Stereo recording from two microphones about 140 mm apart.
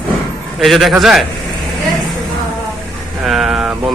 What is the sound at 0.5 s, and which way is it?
Speech, centre (ahead or behind).